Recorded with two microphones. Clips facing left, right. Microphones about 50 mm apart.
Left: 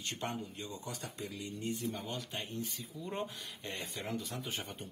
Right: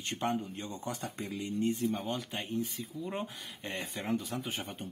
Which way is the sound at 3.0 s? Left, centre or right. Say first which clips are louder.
Right 2 dB; centre.